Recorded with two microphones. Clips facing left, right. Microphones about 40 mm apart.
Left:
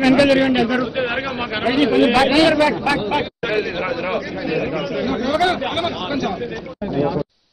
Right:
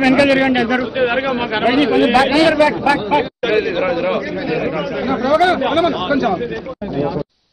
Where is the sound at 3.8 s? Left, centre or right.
Centre.